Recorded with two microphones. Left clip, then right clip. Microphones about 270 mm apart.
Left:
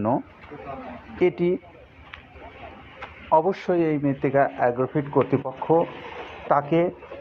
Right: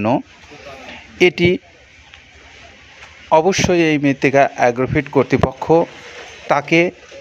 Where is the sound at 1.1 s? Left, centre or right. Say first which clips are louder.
Right 8 dB; right.